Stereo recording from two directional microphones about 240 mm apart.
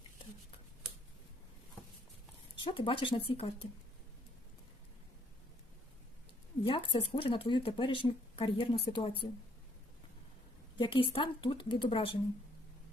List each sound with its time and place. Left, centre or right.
2.6 s speech: left
6.7 s speech: left
10.8 s speech: left